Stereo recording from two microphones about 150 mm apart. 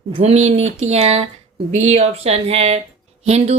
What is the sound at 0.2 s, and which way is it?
Speech, 50° right (ahead or behind).